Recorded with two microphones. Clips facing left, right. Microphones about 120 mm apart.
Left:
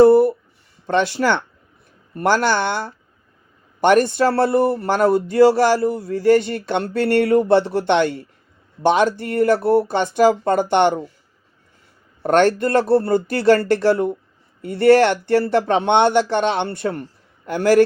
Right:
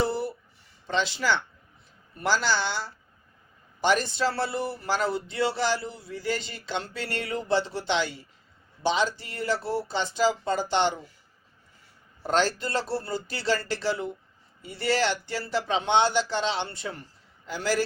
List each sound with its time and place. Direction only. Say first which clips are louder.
0.0 s a sound: left 17 dB; 50° left (ahead or behind)
0.9 s speech: left 8 dB; 55° left (ahead or behind)
12.2 s speech: left 10 dB; 60° left (ahead or behind)